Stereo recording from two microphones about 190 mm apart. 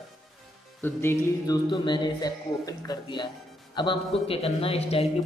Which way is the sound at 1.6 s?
25° left (ahead or behind).